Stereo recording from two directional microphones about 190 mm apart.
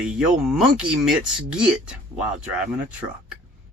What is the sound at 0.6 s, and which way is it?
Speech, 5° right (ahead or behind).